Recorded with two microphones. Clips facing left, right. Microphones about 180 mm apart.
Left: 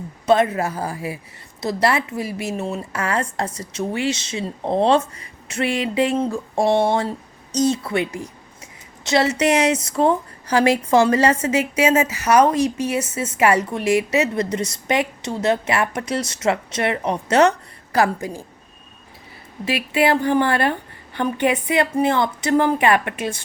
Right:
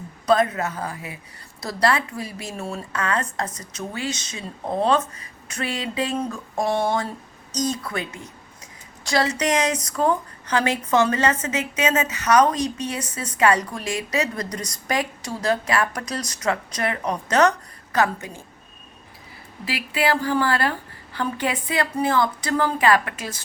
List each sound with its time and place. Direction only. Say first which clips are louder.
0.3 s a woman's voice: left 3 dB; 25° left (ahead or behind)
19.6 s a woman's voice: left 5 dB; 20° left (ahead or behind)